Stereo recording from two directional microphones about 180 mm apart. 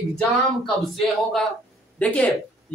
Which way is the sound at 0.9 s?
Centre (ahead or behind).